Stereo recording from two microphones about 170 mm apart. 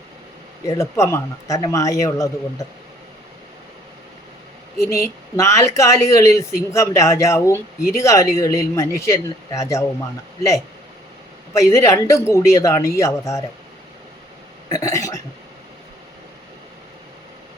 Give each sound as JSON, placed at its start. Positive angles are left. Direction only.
{"t": 0.6, "sound": "speech", "side_deg": 15}
{"t": 5.0, "sound": "speech", "side_deg": 15}
{"t": 11.5, "sound": "speech", "side_deg": 20}
{"t": 14.7, "sound": "speech", "side_deg": 20}